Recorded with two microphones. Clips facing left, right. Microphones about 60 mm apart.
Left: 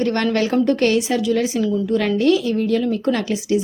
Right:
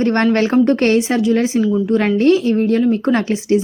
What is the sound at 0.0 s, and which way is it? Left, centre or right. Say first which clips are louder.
A woman's voice: right 4 dB; right.